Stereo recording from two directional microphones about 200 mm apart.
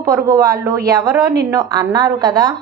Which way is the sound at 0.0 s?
20° right (ahead or behind).